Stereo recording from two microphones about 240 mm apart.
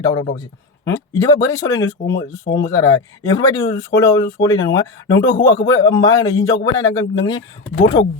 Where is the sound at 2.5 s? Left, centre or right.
Left.